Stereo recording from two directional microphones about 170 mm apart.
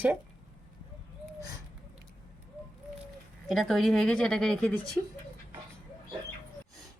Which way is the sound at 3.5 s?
Centre (ahead or behind).